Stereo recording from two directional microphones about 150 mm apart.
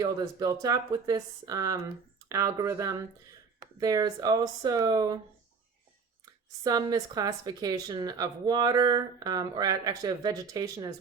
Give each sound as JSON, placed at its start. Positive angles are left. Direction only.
{"t": 0.0, "sound": "speech", "side_deg": -25}
{"t": 6.6, "sound": "speech", "side_deg": -25}